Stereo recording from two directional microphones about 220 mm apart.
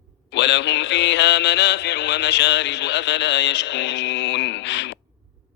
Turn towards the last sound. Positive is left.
turn(degrees=55)  # may be behind; listen again after turning